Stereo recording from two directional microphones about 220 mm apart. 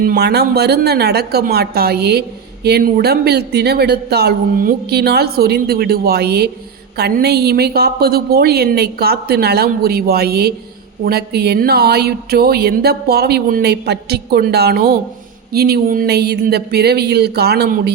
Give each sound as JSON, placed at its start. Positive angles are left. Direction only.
{"t": 0.0, "sound": "speech", "side_deg": -45}